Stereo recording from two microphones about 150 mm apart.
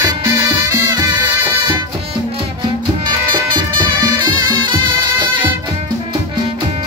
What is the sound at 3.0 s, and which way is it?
Music, 30° right (ahead or behind).